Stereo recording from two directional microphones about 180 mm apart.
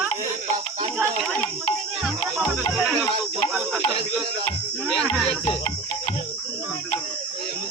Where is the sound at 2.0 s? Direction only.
Centre (ahead or behind).